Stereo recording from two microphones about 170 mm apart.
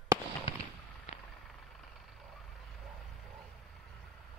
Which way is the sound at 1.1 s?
45° left (ahead or behind).